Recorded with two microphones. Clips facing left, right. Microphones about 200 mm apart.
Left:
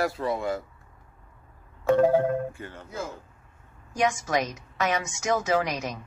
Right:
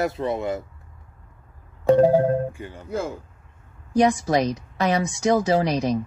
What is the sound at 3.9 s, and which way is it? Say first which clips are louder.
A woman's voice: right 7 dB; 35° right (ahead or behind).